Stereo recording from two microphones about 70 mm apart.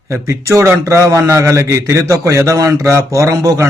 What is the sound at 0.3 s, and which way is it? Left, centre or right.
A man's voice, right.